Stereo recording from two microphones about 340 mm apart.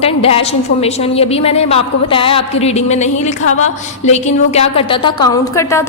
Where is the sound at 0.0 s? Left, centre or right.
Centre.